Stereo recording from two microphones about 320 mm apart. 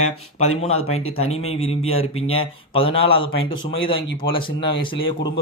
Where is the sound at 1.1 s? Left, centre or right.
Centre.